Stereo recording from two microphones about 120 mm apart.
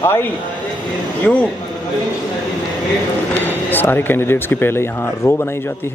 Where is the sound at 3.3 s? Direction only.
15° left (ahead or behind).